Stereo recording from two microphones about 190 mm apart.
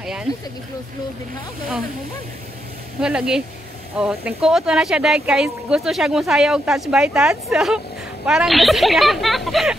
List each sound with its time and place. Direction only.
0.0 s speech: 5° right (ahead or behind)
3.0 s speech: 5° right (ahead or behind)